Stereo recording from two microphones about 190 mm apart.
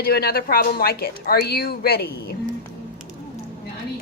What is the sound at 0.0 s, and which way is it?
A woman's voice, 55° left (ahead or behind).